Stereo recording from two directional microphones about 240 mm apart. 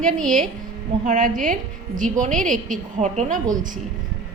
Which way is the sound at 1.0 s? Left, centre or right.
Right.